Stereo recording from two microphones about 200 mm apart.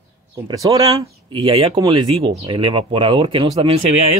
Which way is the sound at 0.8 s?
20° right (ahead or behind).